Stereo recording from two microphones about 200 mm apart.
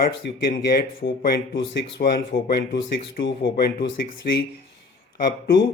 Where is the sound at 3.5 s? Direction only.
55° left (ahead or behind).